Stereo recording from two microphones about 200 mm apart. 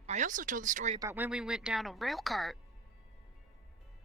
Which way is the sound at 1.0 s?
15° right (ahead or behind).